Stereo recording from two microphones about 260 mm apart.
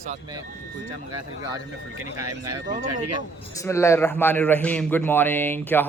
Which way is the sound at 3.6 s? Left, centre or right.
Centre.